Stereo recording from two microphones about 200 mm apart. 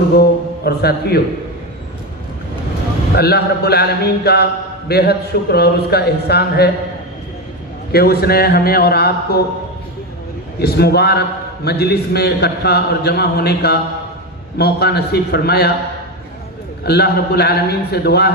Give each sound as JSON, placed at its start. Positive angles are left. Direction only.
{"t": 0.2, "sound": "a man's voice", "side_deg": 55}
{"t": 3.2, "sound": "a man's voice", "side_deg": 55}
{"t": 7.9, "sound": "a man's voice", "side_deg": 50}
{"t": 10.6, "sound": "a man's voice", "side_deg": 50}
{"t": 16.8, "sound": "a man's voice", "side_deg": 55}